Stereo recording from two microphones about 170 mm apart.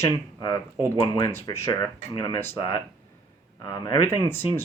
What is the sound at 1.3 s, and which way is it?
Speech, 15° left (ahead or behind).